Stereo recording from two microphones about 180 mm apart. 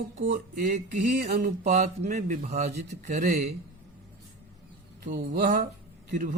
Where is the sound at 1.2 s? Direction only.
50° right (ahead or behind).